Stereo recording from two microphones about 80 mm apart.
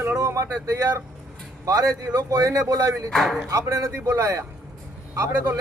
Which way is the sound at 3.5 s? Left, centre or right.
Right.